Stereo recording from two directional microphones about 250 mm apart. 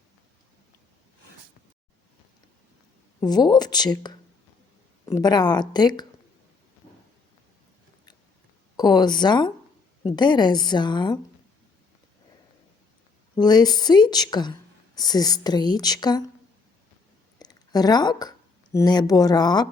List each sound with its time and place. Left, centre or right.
3.2 s a woman's voice: centre
8.7 s a woman's voice: centre
13.3 s a woman's voice: centre
17.4 s speech: centre